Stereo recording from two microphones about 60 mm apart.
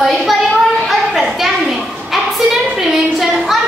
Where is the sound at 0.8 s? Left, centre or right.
Centre.